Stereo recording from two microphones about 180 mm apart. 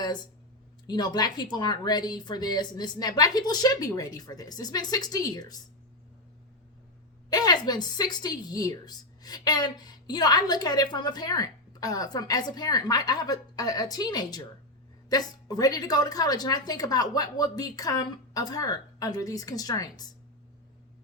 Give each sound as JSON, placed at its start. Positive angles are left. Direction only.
{"t": 0.9, "sound": "a woman's voice", "side_deg": 25}
{"t": 7.3, "sound": "a woman's voice", "side_deg": 20}